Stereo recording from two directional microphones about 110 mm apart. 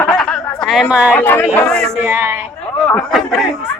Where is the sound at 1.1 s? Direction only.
15° left (ahead or behind).